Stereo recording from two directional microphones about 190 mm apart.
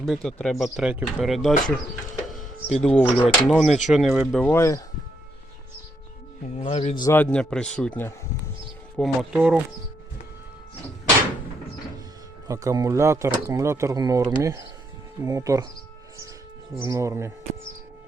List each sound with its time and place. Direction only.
0.0 s speech: centre (ahead or behind)
2.2 s a sound: centre (ahead or behind)
2.7 s speech: 5° left (ahead or behind)
4.4 s speech: 10° left (ahead or behind)
6.6 s a man's voice: 35° left (ahead or behind)
6.9 s a man's voice: 20° left (ahead or behind)
7.2 s speech: 5° left (ahead or behind)
9.0 s speech: 5° right (ahead or behind)
12.5 s speech: 15° right (ahead or behind)
16.8 s speech: 15° right (ahead or behind)